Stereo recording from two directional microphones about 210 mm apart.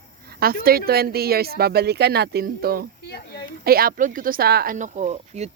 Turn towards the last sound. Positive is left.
turn(degrees=-30)  # may be behind; listen again after turning